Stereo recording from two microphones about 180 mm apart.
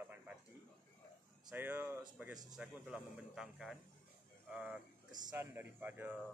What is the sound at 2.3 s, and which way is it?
Speech, 20° right (ahead or behind).